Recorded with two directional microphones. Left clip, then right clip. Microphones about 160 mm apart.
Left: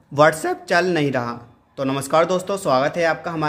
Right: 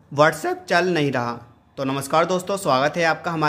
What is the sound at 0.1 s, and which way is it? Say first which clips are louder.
A man's voice: left 2 dB; centre (ahead or behind).